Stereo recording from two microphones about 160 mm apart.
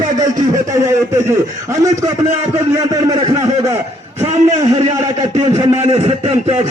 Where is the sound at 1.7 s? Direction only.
20° right (ahead or behind).